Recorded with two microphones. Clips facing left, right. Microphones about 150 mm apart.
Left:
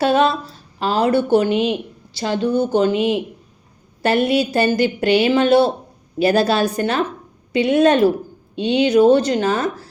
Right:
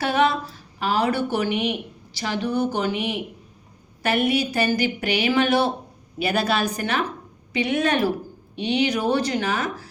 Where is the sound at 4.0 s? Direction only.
30° left (ahead or behind).